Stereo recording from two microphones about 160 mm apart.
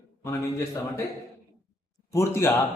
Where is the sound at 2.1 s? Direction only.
15° left (ahead or behind).